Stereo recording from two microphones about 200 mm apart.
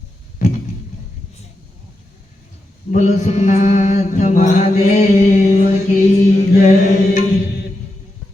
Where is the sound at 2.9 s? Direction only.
35° left (ahead or behind).